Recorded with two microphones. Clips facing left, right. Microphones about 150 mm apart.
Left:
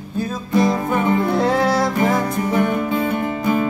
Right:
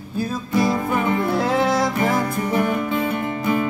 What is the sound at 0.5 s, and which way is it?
Music, 25° left (ahead or behind).